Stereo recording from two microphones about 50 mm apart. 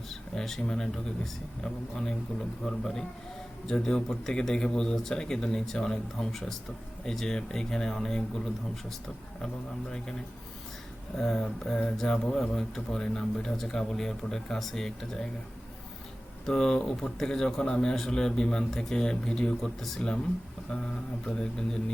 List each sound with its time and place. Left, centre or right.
0.1 s speech: centre
11.2 s speech: centre
16.5 s speech: centre
21.2 s speech: centre